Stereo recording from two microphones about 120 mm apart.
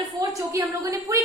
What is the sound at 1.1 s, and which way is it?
Speech, 25° right (ahead or behind).